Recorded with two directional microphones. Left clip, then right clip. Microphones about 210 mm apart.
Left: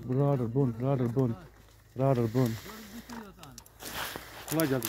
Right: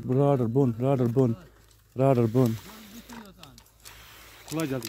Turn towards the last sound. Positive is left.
turn(degrees=0)  # may be behind; listen again after turning